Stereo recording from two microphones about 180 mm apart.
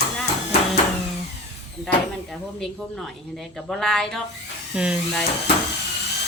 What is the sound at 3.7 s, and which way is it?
Speech, centre (ahead or behind).